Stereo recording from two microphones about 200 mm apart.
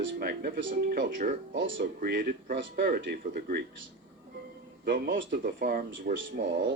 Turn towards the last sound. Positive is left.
turn(degrees=-45)  # may be behind; listen again after turning